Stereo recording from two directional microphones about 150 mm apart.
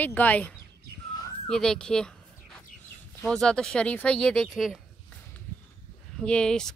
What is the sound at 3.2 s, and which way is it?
Speech, 5° left (ahead or behind).